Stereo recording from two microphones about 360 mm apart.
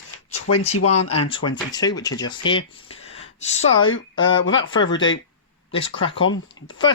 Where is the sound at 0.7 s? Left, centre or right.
Left.